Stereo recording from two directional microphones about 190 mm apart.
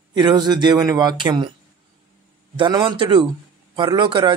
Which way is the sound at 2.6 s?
25° right (ahead or behind).